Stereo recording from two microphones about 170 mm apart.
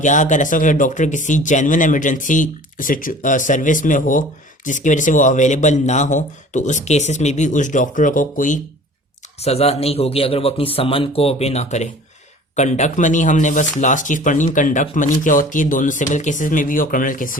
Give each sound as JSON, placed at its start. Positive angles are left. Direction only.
{"t": 0.0, "sound": "speech", "side_deg": 45}
{"t": 9.4, "sound": "a man's voice", "side_deg": 40}